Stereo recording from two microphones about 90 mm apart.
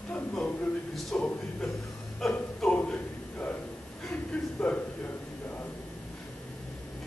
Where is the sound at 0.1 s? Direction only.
5° left (ahead or behind).